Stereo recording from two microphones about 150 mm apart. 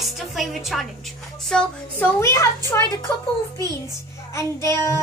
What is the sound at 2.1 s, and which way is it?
Speech, 20° left (ahead or behind).